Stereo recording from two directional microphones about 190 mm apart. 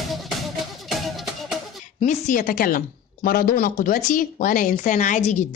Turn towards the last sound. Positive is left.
turn(degrees=40)  # may be behind; listen again after turning